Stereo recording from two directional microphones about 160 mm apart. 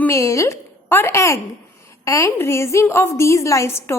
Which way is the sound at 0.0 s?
15° left (ahead or behind).